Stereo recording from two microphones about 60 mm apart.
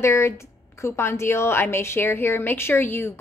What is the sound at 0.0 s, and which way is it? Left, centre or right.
A woman's voice, left.